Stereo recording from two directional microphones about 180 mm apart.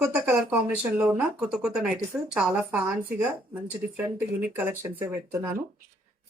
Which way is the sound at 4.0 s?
10° right (ahead or behind).